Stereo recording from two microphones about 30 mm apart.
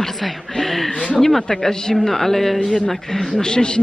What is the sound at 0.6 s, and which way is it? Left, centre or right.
A woman's voice, centre.